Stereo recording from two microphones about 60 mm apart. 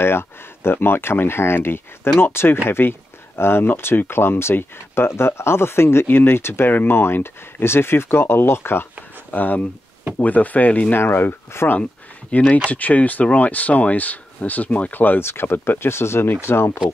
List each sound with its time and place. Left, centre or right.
0.0 s speech: left
9.3 s speech: left
11.0 s speech: left
12.3 s speech: left